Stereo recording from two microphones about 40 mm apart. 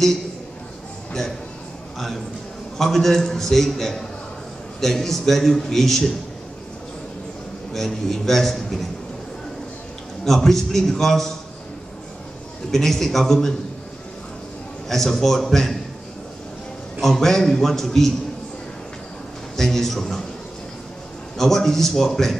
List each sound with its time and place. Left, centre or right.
2.8 s a man's voice: centre
7.7 s a man's voice: centre
10.2 s a man's voice: centre
12.7 s a man's voice: centre
14.9 s a man's voice: centre
17.0 s a man's voice: centre
19.5 s a man's voice: centre
21.4 s a man's voice: centre